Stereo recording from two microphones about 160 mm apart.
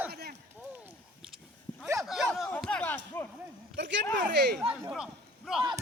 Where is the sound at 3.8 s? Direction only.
90° right.